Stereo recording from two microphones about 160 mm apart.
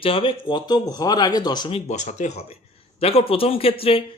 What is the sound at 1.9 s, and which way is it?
Speech, 45° left (ahead or behind).